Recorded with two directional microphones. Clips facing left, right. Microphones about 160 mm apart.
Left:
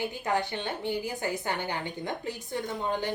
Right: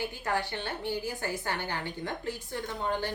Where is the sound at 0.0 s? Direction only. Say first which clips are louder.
Left 3 dB; 20° left (ahead or behind).